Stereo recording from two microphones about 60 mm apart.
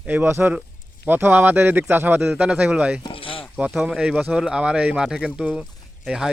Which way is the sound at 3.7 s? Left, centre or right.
Centre.